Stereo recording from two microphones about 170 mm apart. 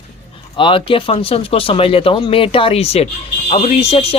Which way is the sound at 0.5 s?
30° left (ahead or behind).